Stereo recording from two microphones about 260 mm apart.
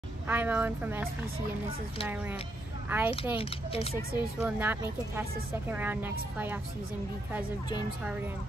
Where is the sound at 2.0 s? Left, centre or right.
Centre.